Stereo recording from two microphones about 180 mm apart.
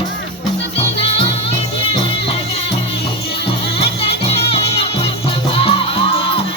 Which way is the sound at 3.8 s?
30° left (ahead or behind).